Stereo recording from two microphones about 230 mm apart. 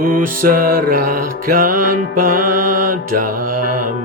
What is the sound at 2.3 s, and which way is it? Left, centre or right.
Mantra, right.